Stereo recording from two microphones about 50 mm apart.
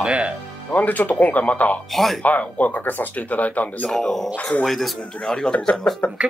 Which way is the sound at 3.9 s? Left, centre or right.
Centre.